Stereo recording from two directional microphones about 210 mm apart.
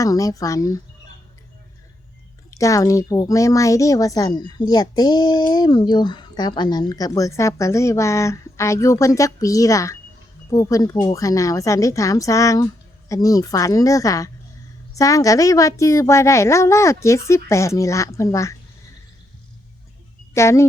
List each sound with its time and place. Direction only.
0.0 s speech: 15° left (ahead or behind)
2.5 s speech: 15° left (ahead or behind)
20.3 s speech: 15° left (ahead or behind)